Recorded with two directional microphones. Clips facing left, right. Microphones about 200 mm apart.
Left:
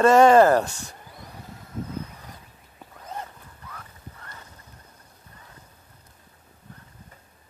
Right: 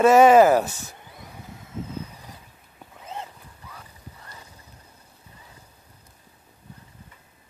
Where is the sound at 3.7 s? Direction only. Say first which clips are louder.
Left 2 dB; 10° right (ahead or behind).